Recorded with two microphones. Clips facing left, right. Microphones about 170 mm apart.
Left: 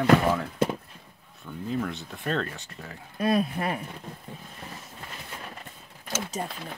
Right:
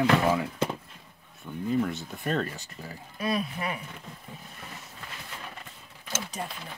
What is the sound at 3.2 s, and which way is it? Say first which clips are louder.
Speech: left 5 dB; 50° left (ahead or behind).